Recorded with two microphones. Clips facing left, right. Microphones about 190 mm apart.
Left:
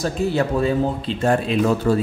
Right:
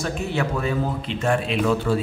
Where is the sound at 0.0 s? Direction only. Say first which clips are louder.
Left 4 dB; 35° left (ahead or behind).